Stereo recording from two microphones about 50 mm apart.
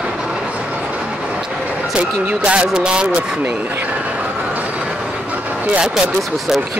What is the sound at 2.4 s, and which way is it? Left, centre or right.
Speech, right.